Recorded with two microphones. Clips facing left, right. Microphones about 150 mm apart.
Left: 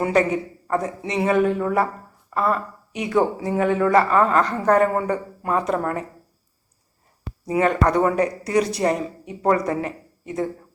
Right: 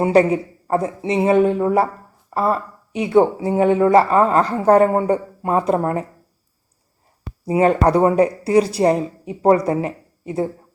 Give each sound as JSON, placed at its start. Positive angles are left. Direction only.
{"t": 0.0, "sound": "speech", "side_deg": -30}
{"t": 7.4, "sound": "speech", "side_deg": -30}